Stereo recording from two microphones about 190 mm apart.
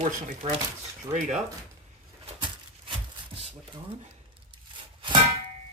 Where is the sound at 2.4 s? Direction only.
25° right (ahead or behind).